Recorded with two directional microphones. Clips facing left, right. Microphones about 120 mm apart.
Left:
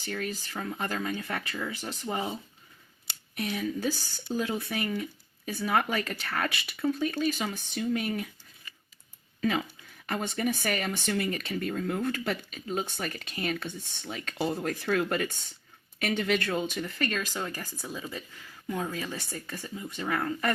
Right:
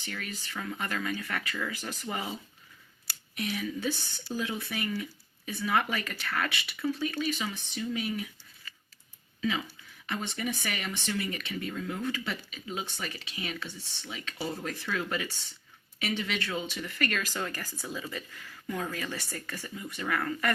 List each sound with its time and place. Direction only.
0.0 s speech: 35° left (ahead or behind)
3.1 s a sound: 20° left (ahead or behind)
3.4 s speech: 40° left (ahead or behind)
9.4 s speech: 50° left (ahead or behind)
17.0 s speech: 25° left (ahead or behind)